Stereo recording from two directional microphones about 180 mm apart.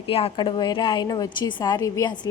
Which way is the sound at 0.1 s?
30° left (ahead or behind).